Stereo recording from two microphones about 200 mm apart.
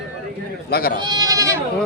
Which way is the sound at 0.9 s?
20° right (ahead or behind).